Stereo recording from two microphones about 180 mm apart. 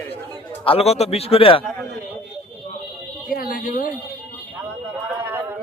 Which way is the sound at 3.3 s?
50° left (ahead or behind).